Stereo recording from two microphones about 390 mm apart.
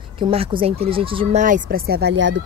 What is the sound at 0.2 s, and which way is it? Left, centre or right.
Speech, centre.